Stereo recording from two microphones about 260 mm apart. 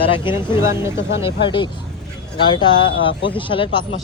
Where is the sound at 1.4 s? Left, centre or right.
Centre.